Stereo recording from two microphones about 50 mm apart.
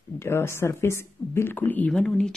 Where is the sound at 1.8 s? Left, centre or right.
Left.